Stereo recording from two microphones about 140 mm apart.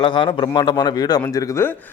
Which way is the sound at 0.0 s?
35° left (ahead or behind).